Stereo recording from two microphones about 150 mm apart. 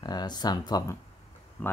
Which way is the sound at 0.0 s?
30° left (ahead or behind).